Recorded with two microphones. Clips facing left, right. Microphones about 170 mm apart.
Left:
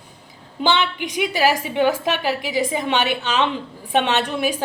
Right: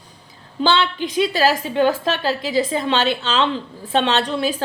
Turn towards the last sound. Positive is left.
turn(degrees=20)  # may be behind; listen again after turning